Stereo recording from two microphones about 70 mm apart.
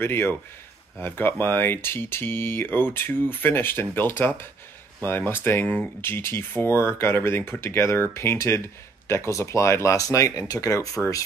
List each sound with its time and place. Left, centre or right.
0.0 s speech: left